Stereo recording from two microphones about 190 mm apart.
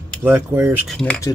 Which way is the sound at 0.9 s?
5° left (ahead or behind).